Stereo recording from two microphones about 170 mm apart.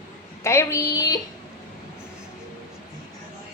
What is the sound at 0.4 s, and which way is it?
Speech, 15° left (ahead or behind).